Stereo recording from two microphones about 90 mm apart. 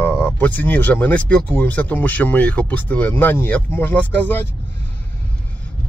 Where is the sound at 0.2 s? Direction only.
20° left (ahead or behind).